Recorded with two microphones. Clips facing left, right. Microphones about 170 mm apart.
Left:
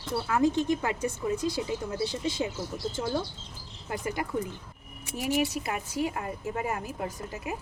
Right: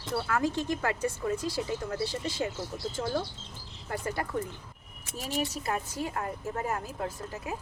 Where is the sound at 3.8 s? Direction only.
15° left (ahead or behind).